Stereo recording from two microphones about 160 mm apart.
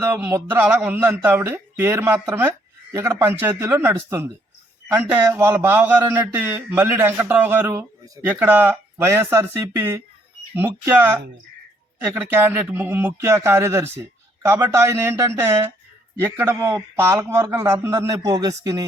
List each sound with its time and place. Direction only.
0.0 s a man's voice: 15° right (ahead or behind)